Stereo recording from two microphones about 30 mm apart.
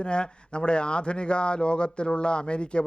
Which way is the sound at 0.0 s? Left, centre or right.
Left.